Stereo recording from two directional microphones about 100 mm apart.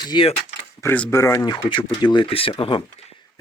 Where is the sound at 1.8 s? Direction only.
50° left (ahead or behind).